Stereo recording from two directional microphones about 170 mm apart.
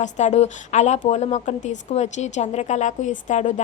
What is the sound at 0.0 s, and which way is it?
A woman's voice, 45° left (ahead or behind).